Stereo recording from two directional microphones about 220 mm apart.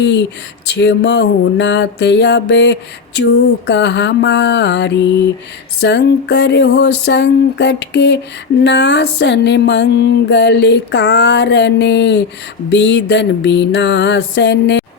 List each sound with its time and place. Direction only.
0.0 s music: 55° left (ahead or behind)